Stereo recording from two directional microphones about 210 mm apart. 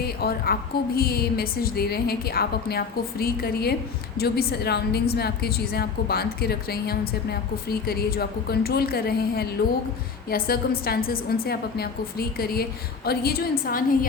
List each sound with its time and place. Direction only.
0.0 s a woman's voice: 45° left (ahead or behind)